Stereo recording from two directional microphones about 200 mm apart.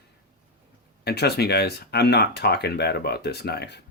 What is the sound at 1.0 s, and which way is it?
Speech, 55° left (ahead or behind).